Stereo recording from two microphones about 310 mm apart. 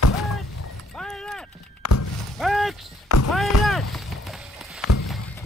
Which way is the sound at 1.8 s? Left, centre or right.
Left.